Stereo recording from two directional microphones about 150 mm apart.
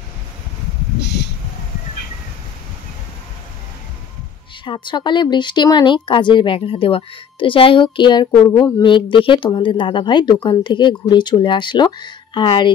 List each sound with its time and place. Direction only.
4.6 s speech: 30° left (ahead or behind)